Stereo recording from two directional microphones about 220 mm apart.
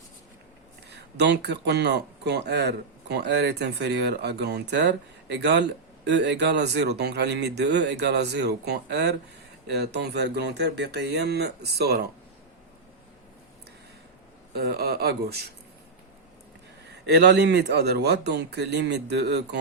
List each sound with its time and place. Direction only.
0.9 s speech: 50° right (ahead or behind)
14.5 s speech: 45° right (ahead or behind)
17.1 s speech: 50° right (ahead or behind)